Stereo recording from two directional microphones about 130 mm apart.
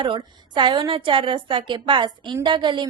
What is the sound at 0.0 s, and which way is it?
A woman's voice, 40° right (ahead or behind).